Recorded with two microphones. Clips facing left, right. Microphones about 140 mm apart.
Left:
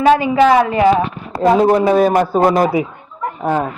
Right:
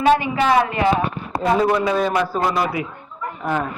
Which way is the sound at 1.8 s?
50° left (ahead or behind).